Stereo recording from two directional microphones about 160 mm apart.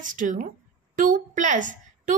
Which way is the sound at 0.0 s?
55° right (ahead or behind).